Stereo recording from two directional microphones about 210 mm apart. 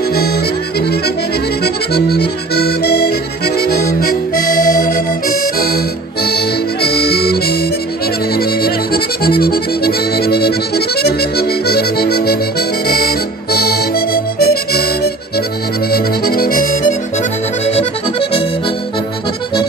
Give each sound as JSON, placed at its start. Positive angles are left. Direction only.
{"t": 0.7, "sound": "accordion", "side_deg": 50}
{"t": 6.2, "sound": "music", "side_deg": 50}
{"t": 8.4, "sound": "accordion", "side_deg": 45}